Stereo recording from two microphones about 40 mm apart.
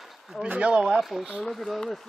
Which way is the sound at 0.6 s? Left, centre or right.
Right.